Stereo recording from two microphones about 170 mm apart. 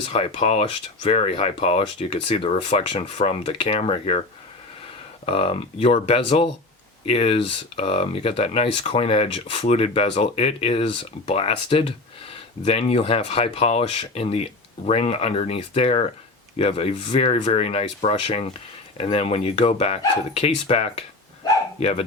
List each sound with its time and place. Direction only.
0.0 s speech: 35° left (ahead or behind)
5.2 s speech: 35° left (ahead or behind)